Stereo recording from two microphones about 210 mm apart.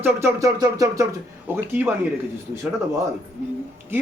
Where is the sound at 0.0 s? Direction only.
15° right (ahead or behind).